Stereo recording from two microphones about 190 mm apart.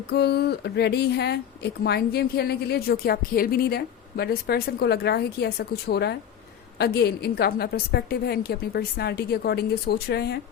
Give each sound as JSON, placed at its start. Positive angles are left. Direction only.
{"t": 0.1, "sound": "a woman's voice", "side_deg": 60}